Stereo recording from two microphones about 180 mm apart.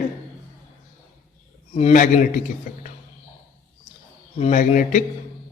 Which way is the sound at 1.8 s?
40° left (ahead or behind).